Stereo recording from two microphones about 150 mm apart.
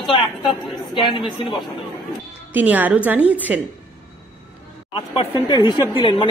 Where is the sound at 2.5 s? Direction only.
10° right (ahead or behind).